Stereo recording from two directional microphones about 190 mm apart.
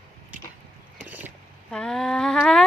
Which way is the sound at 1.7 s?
5° left (ahead or behind).